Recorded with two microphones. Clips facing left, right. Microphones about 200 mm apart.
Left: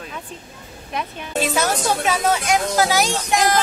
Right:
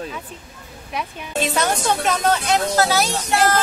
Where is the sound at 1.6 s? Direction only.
5° left (ahead or behind).